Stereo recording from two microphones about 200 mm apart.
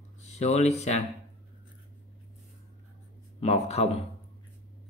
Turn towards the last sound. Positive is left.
turn(degrees=30)  # may be behind; listen again after turning